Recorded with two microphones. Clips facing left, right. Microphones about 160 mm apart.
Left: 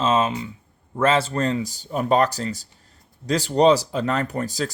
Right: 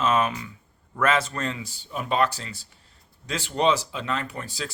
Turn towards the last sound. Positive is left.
turn(degrees=40)  # may be behind; listen again after turning